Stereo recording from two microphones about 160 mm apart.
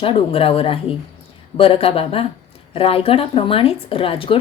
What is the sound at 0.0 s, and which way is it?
Speech, 35° left (ahead or behind).